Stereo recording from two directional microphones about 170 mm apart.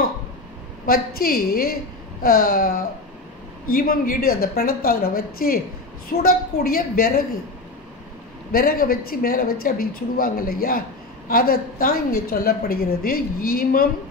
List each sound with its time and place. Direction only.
0.8 s a woman's voice: 60° left (ahead or behind)
8.5 s a woman's voice: 60° left (ahead or behind)